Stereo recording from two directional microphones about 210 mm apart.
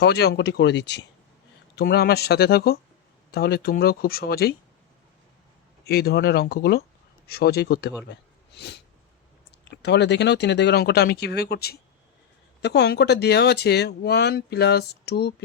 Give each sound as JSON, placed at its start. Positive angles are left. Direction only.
{"t": 0.0, "sound": "speech", "side_deg": 50}
{"t": 5.8, "sound": "speech", "side_deg": 50}